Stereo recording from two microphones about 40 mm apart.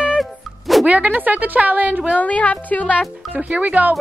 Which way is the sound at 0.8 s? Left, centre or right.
Right.